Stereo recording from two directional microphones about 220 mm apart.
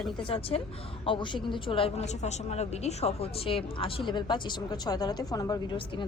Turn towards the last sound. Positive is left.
turn(degrees=20)  # may be behind; listen again after turning